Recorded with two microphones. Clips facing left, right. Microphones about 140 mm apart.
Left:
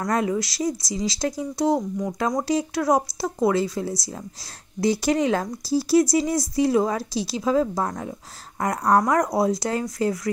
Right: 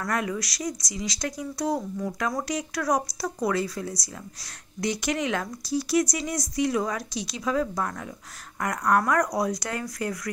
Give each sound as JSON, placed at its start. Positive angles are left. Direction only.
{"t": 0.0, "sound": "speech", "side_deg": 25}